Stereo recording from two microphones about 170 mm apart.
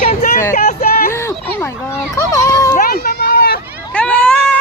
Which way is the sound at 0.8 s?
60° left (ahead or behind).